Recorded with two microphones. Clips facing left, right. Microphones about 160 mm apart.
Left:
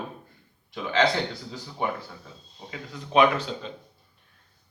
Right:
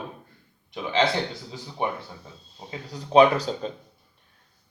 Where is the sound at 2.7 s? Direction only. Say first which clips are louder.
Right 5 dB; 35° right (ahead or behind).